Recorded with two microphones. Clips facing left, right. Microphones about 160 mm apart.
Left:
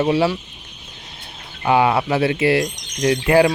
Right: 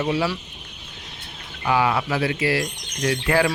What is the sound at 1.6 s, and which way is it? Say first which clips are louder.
Speech: left 5 dB; 25° left (ahead or behind).